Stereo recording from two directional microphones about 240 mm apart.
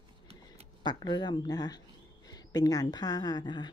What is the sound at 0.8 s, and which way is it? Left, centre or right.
Speech, centre.